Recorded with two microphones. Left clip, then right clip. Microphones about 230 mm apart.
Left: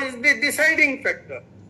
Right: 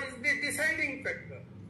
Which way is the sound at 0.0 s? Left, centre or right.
Left.